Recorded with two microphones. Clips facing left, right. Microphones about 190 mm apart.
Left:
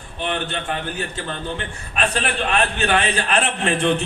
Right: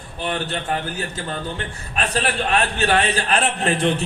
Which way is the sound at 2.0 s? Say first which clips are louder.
Even; 35° right (ahead or behind).